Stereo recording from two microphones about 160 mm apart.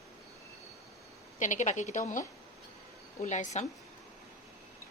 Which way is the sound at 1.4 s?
50° left (ahead or behind).